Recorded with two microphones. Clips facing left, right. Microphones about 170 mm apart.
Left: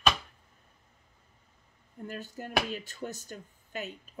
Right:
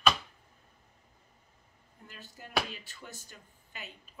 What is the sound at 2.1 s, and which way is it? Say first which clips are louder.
Speech: left 11 dB; 50° left (ahead or behind).